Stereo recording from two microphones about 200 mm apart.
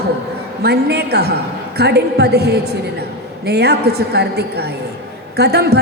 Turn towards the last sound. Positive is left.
turn(degrees=-55)  # may be behind; listen again after turning